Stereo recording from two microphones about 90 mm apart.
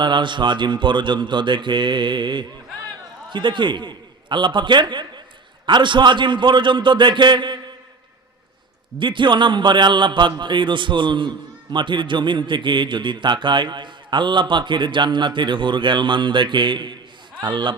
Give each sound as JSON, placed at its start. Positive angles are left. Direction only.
{"t": 0.0, "sound": "a man's voice", "side_deg": -60}
{"t": 9.0, "sound": "a man's voice", "side_deg": -65}